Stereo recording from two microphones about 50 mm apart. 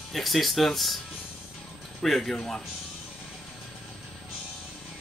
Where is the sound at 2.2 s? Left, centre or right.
Centre.